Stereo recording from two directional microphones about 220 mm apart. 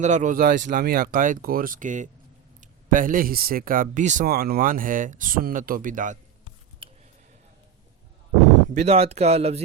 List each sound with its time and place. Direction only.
0.0 s speech: 35° right (ahead or behind)
6.8 s a sound: 25° right (ahead or behind)
8.7 s speech: 30° right (ahead or behind)